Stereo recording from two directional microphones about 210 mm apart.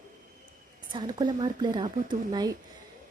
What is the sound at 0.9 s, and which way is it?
Speech, 20° right (ahead or behind).